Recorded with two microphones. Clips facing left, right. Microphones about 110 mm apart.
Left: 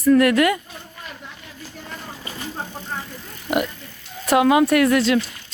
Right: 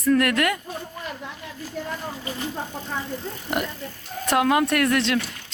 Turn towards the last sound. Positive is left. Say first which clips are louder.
# left 5 dB
turn(degrees=5)  # may be behind; listen again after turning